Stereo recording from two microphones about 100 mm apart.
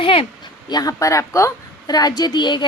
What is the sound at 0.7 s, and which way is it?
A woman's voice, 40° left (ahead or behind).